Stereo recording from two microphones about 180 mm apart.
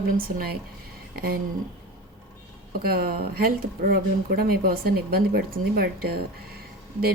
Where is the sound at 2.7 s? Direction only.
55° right (ahead or behind).